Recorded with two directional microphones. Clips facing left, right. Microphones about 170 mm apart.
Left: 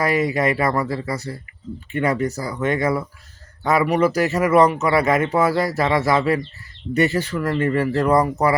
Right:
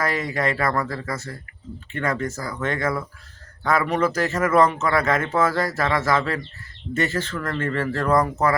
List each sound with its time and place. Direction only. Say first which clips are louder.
0.0 s speech: left 5 dB; 15° left (ahead or behind)